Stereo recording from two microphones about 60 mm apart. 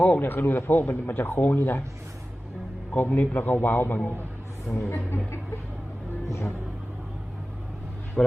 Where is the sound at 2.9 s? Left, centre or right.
Left.